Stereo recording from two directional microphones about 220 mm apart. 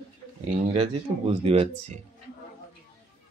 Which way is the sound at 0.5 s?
30° right (ahead or behind).